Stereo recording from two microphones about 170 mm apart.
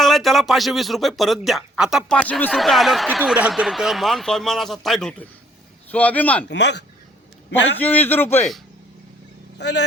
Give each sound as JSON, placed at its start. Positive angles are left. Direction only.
{"t": 0.0, "sound": "speech", "side_deg": 0}
{"t": 2.1, "sound": "a man's voice", "side_deg": 10}
{"t": 6.5, "sound": "speech", "side_deg": 90}
{"t": 7.8, "sound": "a man's voice", "side_deg": 10}
{"t": 9.6, "sound": "speech", "side_deg": 90}